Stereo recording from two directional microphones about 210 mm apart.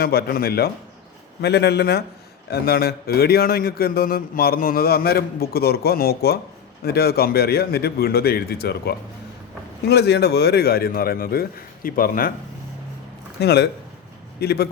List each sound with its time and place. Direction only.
0.0 s a man's voice: 45° left (ahead or behind)
13.4 s a man's voice: 50° left (ahead or behind)